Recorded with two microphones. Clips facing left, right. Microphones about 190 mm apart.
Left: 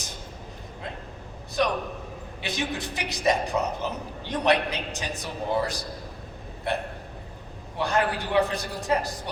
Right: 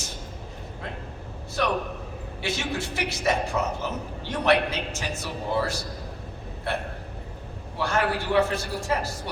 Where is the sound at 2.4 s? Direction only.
15° left (ahead or behind).